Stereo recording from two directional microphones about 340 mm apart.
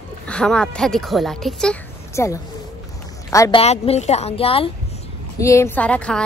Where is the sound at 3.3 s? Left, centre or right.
Centre.